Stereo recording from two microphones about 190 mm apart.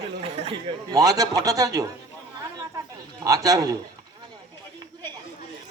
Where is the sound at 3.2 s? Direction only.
20° right (ahead or behind).